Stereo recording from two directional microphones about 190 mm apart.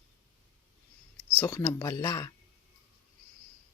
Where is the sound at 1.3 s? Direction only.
15° left (ahead or behind).